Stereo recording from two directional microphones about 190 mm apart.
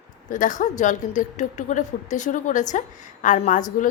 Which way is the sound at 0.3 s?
40° left (ahead or behind).